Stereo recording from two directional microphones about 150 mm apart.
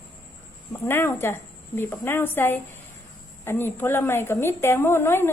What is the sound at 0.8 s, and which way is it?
A woman's voice, 15° left (ahead or behind).